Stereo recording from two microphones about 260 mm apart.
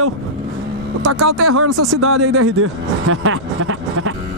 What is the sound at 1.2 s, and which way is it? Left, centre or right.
Speech, right.